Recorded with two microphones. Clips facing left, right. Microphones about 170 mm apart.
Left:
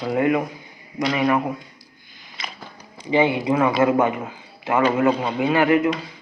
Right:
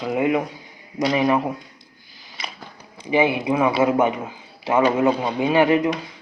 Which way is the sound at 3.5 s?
10° right (ahead or behind).